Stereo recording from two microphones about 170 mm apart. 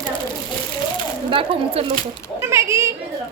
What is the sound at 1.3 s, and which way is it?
Speech, 30° right (ahead or behind).